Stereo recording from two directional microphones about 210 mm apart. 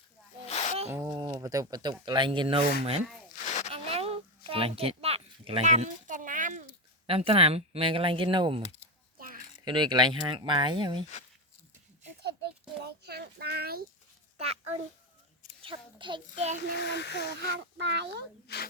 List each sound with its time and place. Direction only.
0.4 s snake: 30° left (ahead or behind)
0.9 s speech: 15° right (ahead or behind)
3.4 s a sound: 35° left (ahead or behind)
3.7 s a sound: 30° right (ahead or behind)
7.1 s speech: 25° right (ahead or behind)
9.1 s a sound: 40° right (ahead or behind)
9.6 s speech: 20° right (ahead or behind)
12.8 s a sound: 50° right (ahead or behind)
15.6 s speech: 25° right (ahead or behind)
16.8 s speech: 55° left (ahead or behind)
17.7 s speech: 55° right (ahead or behind)
18.4 s speech: 50° left (ahead or behind)